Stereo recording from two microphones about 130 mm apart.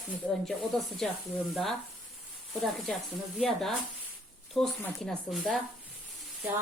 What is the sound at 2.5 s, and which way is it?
Speech, centre (ahead or behind).